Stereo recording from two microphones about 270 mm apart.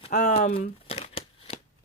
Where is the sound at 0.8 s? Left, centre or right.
Left.